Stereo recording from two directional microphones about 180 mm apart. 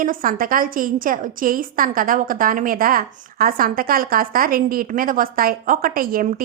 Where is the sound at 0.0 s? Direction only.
50° right (ahead or behind).